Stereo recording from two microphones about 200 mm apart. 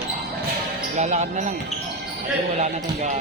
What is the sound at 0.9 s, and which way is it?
Speech, 35° right (ahead or behind).